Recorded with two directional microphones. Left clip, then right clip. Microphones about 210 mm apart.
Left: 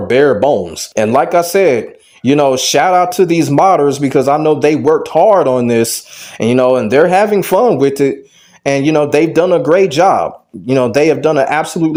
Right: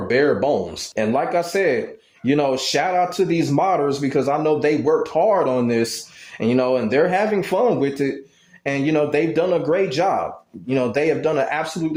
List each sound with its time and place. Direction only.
0.1 s speech: 30° left (ahead or behind)